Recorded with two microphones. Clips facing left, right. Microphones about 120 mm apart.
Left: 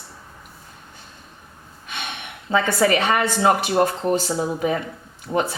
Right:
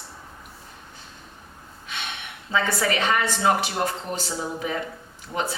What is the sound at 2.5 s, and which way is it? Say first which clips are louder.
Speech: left 6 dB; 50° left (ahead or behind).